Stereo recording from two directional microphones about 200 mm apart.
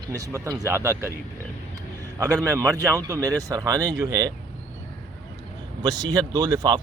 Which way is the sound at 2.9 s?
15° right (ahead or behind).